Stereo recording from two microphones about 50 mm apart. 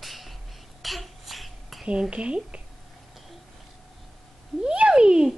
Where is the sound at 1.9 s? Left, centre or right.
Right.